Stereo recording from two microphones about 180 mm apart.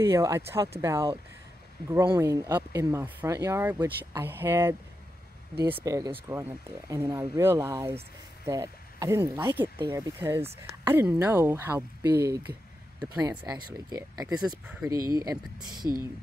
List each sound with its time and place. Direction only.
0.0 s speech: 15° right (ahead or behind)
2.1 s speech: 15° right (ahead or behind)